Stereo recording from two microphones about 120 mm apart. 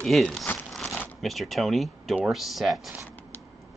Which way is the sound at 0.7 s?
Centre (ahead or behind).